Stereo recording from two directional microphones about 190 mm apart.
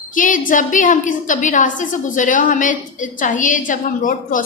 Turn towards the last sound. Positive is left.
turn(degrees=45)  # may be behind; listen again after turning